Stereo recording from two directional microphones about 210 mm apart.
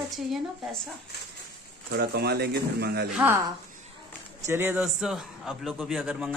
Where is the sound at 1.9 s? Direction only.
50° right (ahead or behind).